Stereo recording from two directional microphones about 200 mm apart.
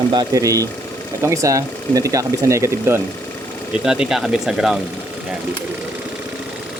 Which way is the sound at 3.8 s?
5° right (ahead or behind).